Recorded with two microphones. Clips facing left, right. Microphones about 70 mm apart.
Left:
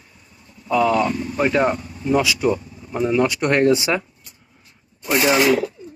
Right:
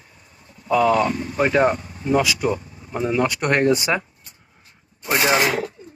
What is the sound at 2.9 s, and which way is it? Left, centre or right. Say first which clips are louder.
Speech: left 2 dB; right.